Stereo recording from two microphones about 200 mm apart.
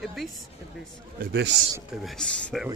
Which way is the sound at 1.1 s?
50° right (ahead or behind).